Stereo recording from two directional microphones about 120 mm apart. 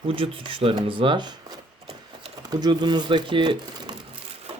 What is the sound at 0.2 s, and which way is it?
Speech, 50° right (ahead or behind).